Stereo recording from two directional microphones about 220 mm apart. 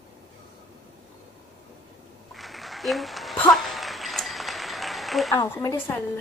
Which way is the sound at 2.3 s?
Centre (ahead or behind).